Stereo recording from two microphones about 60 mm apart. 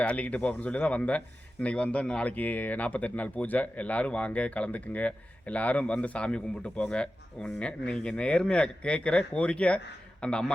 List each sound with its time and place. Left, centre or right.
0.0 s speech: left